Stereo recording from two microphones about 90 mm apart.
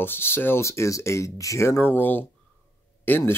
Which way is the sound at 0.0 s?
25° left (ahead or behind).